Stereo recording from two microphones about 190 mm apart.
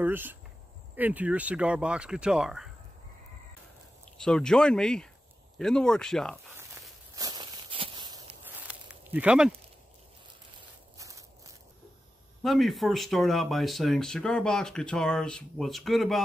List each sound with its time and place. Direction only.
0.0 s speech: 10° right (ahead or behind)
4.2 s speech: 5° left (ahead or behind)
7.2 s walk: 20° right (ahead or behind)
8.5 s a sound: 10° right (ahead or behind)
11.0 s a sound: 15° right (ahead or behind)
12.4 s speech: centre (ahead or behind)